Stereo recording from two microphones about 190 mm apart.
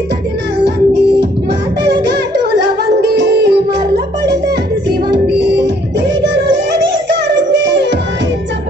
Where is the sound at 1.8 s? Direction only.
60° right (ahead or behind).